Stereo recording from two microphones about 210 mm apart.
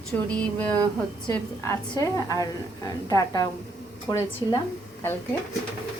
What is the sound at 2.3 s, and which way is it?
A woman's voice, 15° left (ahead or behind).